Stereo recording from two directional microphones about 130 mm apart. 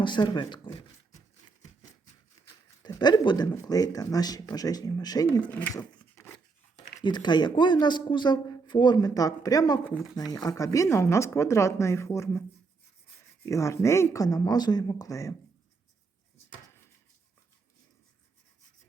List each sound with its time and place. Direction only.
0.0 s speech: 35° left (ahead or behind)
2.8 s speech: 35° left (ahead or behind)
5.7 s a sound: 20° left (ahead or behind)
7.0 s speech: 35° left (ahead or behind)
13.4 s speech: 25° left (ahead or behind)